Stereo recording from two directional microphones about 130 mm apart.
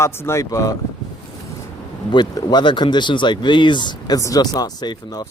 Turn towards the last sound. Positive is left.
turn(degrees=30)  # may be behind; listen again after turning